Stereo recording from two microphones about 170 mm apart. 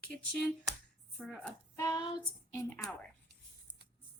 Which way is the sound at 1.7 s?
20° left (ahead or behind).